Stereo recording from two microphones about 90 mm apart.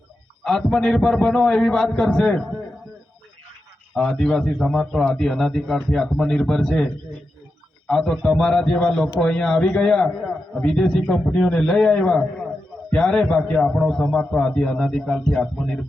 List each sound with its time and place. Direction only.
0.4 s a man's voice: 5° left (ahead or behind)
3.9 s a man's voice: 5° left (ahead or behind)